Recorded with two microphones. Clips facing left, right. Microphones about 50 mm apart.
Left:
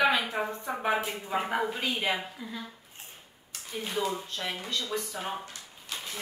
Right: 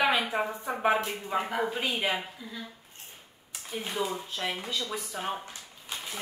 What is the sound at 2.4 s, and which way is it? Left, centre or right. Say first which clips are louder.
Speech: left 2 dB; centre.